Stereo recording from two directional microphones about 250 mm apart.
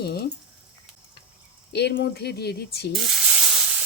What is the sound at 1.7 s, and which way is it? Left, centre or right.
Speech, left.